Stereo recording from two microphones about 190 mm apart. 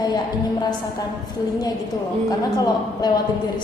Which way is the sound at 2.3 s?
20° left (ahead or behind).